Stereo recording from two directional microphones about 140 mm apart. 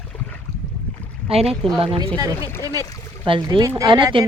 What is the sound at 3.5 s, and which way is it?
Speech, 40° right (ahead or behind).